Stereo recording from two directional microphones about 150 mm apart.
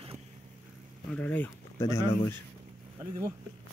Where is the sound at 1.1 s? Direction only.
10° left (ahead or behind).